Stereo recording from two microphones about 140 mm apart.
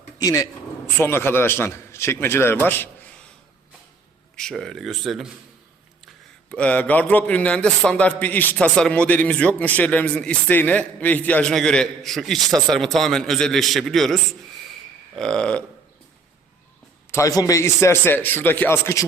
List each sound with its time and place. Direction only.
0.2 s a man's voice: 25° left (ahead or behind)
4.4 s a man's voice: 5° left (ahead or behind)
6.5 s a man's voice: 10° left (ahead or behind)
17.1 s a man's voice: 25° left (ahead or behind)